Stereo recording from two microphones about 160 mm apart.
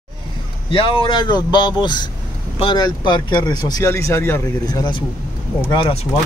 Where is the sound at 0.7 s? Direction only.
35° left (ahead or behind).